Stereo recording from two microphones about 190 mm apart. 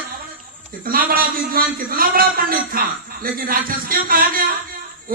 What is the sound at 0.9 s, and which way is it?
A man's voice, 50° right (ahead or behind).